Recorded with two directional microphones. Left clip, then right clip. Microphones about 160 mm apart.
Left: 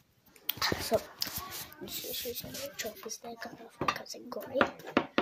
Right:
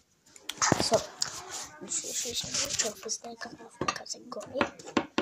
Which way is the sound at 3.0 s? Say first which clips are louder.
Right 6 dB; 45° right (ahead or behind).